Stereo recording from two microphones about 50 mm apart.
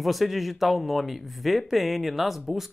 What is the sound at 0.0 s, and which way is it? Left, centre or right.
Speech, centre.